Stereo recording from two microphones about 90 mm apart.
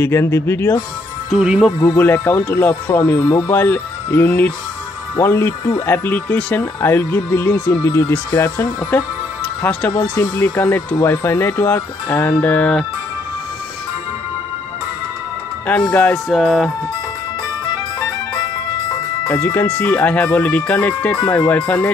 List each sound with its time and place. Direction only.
0.0 s speech: 30° left (ahead or behind)
1.4 s speech: 10° right (ahead or behind)
1.8 s speech: 25° left (ahead or behind)
7.6 s speech: 45° left (ahead or behind)
8.5 s speech: 20° left (ahead or behind)
15.9 s speech: 15° left (ahead or behind)
16.3 s music: centre (ahead or behind)
19.2 s speech: 20° left (ahead or behind)